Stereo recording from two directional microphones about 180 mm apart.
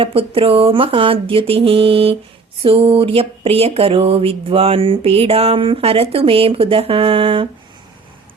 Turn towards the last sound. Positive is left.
turn(degrees=-30)  # may be behind; listen again after turning